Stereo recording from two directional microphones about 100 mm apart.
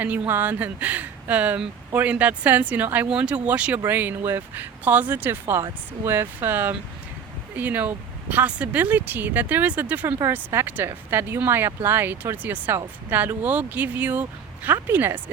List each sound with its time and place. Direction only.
0.0 s speech: 20° right (ahead or behind)